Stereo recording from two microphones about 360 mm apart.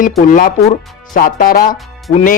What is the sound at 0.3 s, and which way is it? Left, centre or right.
Speech, left.